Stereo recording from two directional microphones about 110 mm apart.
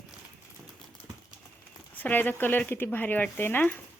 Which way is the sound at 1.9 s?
15° left (ahead or behind).